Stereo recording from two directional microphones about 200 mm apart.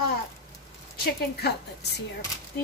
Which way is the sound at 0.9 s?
55° left (ahead or behind).